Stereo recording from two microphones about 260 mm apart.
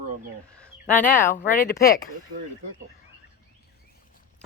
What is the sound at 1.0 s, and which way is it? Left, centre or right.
Speech, left.